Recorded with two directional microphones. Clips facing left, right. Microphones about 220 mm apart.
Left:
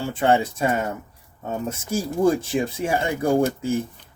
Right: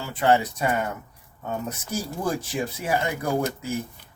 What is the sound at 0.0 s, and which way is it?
Speech, 25° left (ahead or behind).